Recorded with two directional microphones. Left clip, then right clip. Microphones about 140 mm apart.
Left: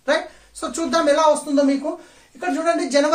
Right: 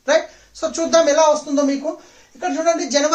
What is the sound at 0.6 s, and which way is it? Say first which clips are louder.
A man's voice: right 5 dB; 15° right (ahead or behind).